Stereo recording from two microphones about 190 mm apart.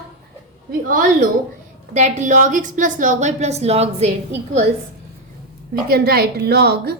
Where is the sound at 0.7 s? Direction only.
45° right (ahead or behind).